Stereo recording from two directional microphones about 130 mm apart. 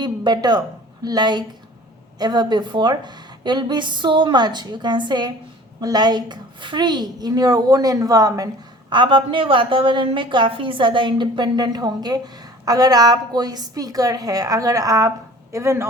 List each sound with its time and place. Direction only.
0.0 s a woman's voice: 35° right (ahead or behind)
8.9 s a woman's voice: 40° right (ahead or behind); by 15.9 s 20° right (ahead or behind)